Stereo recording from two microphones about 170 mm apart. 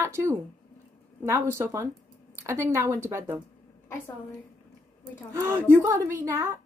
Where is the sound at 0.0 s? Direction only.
15° right (ahead or behind).